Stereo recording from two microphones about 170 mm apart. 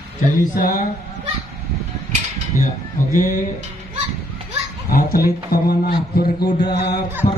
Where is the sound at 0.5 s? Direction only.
50° left (ahead or behind).